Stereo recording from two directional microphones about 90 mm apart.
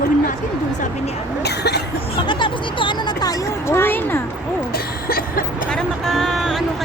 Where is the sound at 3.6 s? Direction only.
25° left (ahead or behind).